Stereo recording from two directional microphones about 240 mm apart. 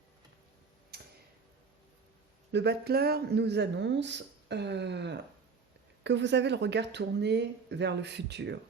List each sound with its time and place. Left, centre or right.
2.5 s speech: right